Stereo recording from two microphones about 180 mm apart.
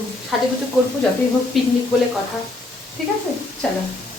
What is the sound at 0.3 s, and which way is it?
Speech, centre (ahead or behind).